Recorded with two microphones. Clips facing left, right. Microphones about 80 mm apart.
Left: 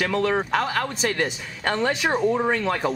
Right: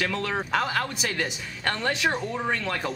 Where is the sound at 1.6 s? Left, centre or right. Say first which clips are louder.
Left 3 dB; centre.